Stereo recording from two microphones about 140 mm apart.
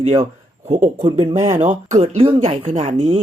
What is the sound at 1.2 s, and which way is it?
Speech, 20° right (ahead or behind).